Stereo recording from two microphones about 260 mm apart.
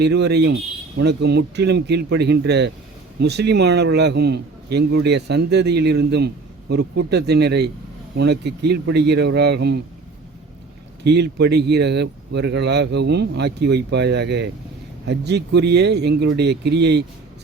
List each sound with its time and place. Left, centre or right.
0.0 s a man's voice: right
11.0 s a man's voice: right